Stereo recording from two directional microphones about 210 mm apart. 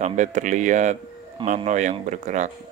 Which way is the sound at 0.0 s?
35° right (ahead or behind).